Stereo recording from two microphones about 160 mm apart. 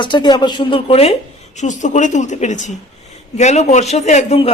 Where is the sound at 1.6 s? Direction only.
50° left (ahead or behind).